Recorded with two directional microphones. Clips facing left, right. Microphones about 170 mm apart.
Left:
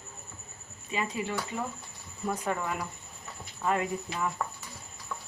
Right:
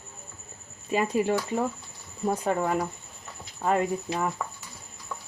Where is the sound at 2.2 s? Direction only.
35° right (ahead or behind).